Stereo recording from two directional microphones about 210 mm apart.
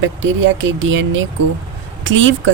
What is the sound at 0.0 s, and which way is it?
A woman's voice, 65° right (ahead or behind).